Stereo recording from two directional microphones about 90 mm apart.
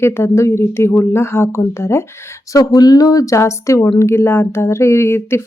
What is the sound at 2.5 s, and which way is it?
Speech, 45° left (ahead or behind).